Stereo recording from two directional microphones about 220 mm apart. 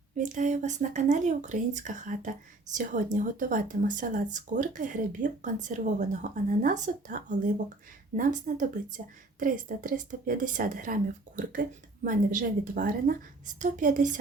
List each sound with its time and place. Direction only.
0.2 s speech: 35° right (ahead or behind)